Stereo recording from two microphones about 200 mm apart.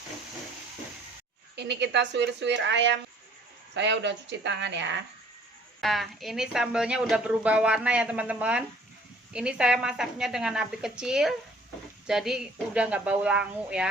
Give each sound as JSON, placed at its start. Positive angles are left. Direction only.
{"t": 1.5, "sound": "a woman's voice", "side_deg": -60}
{"t": 5.8, "sound": "a woman's voice", "side_deg": 0}